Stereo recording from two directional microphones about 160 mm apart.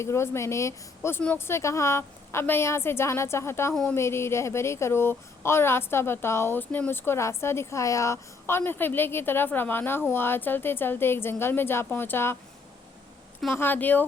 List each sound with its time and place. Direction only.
0.0 s speech: 15° left (ahead or behind)
13.5 s speech: 15° left (ahead or behind)